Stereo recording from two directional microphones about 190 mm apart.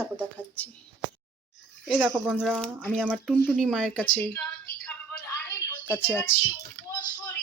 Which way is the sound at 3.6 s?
Centre (ahead or behind).